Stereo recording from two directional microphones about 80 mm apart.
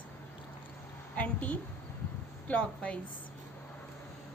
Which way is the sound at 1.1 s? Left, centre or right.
Centre.